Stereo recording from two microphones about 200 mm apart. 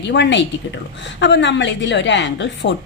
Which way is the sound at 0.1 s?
60° left (ahead or behind).